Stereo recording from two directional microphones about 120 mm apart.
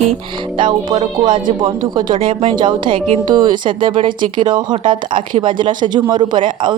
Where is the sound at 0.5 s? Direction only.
40° right (ahead or behind).